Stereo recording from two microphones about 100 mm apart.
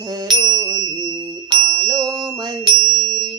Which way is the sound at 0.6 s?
35° right (ahead or behind).